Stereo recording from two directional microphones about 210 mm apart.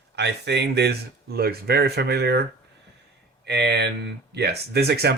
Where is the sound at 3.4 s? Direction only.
55° right (ahead or behind).